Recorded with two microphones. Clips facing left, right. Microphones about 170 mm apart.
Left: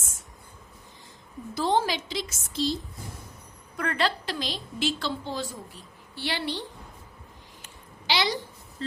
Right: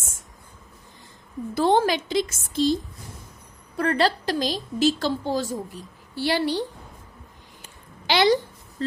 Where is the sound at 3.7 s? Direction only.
35° right (ahead or behind).